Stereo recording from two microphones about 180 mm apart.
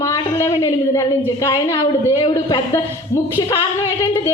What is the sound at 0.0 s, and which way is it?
A woman's voice, 15° left (ahead or behind).